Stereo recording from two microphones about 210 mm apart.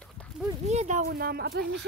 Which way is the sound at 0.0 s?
5° left (ahead or behind).